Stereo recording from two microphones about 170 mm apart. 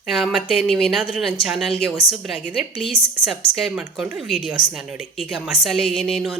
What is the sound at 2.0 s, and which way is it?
Speech, 30° left (ahead or behind).